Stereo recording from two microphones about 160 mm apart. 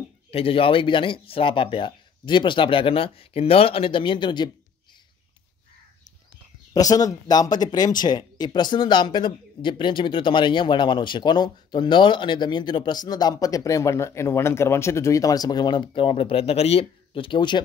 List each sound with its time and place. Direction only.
0.3 s speech: 35° left (ahead or behind)
6.7 s speech: 20° left (ahead or behind)